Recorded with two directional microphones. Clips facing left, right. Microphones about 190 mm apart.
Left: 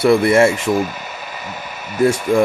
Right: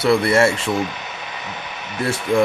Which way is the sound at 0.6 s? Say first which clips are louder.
Left 4 dB; 5° left (ahead or behind).